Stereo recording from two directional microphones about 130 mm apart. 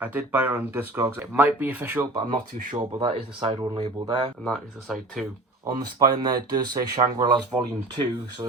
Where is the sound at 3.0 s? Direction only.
45° right (ahead or behind).